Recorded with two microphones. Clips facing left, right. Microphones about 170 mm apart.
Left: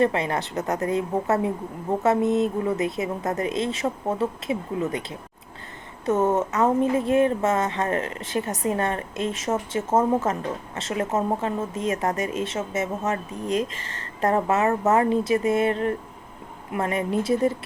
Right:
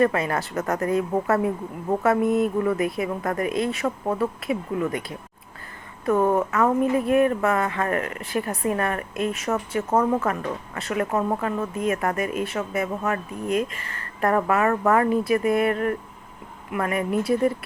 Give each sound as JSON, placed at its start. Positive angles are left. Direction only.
{"t": 0.0, "sound": "speech", "side_deg": 25}